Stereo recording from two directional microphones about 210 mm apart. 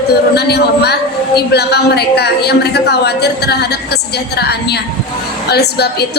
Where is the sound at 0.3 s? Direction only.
50° left (ahead or behind).